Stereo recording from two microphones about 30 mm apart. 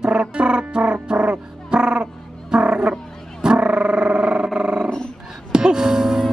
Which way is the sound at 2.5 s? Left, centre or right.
Right.